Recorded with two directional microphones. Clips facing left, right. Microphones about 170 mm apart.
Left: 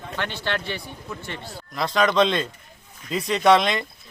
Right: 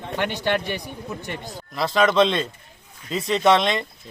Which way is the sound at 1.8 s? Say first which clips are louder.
Right 2 dB; centre (ahead or behind).